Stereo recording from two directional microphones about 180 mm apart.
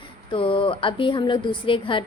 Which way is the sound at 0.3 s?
30° left (ahead or behind).